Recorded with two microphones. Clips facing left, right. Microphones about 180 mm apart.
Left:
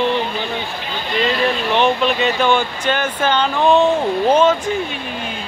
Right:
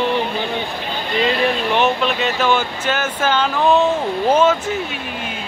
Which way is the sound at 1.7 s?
5° right (ahead or behind).